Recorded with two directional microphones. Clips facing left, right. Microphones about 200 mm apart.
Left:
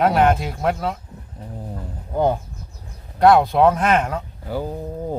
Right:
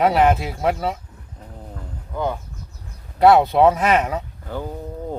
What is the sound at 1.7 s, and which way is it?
Roaring cats, 40° left (ahead or behind).